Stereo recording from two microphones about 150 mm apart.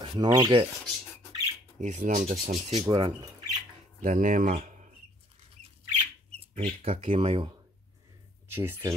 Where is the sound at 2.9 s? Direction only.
35° right (ahead or behind).